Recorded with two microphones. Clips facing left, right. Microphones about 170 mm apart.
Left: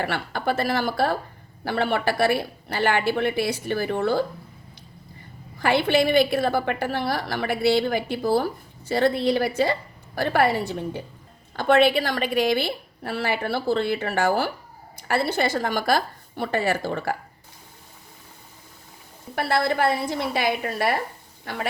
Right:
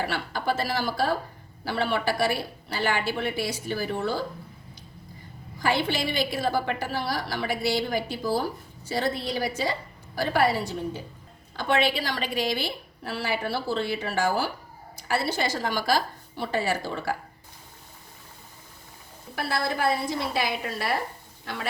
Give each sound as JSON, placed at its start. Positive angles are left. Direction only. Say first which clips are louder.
{"t": 0.0, "sound": "a woman's voice", "louder": "left 3 dB", "side_deg": 55}
{"t": 5.5, "sound": "a woman's voice", "louder": "left 6 dB", "side_deg": 60}
{"t": 19.4, "sound": "a woman's voice", "louder": "left 5 dB", "side_deg": 65}